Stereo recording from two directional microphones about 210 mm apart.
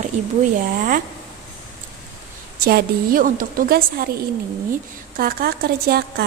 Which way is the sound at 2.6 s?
40° right (ahead or behind).